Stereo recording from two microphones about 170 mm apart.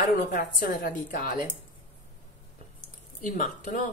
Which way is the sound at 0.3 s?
60° left (ahead or behind).